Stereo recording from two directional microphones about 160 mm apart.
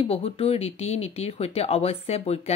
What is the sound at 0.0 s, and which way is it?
Speech, 35° left (ahead or behind).